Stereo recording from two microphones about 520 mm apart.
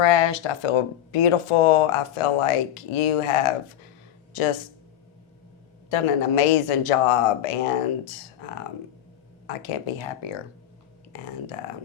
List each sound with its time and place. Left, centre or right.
0.0 s speech: left
5.9 s speech: left
9.5 s speech: left